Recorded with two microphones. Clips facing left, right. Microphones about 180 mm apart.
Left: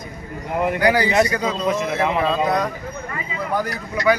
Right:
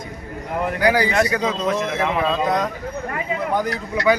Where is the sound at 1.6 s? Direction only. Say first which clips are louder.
Left 1 dB; 10° left (ahead or behind).